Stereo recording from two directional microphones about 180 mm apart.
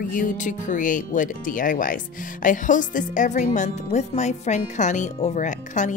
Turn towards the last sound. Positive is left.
turn(degrees=45)  # may be behind; listen again after turning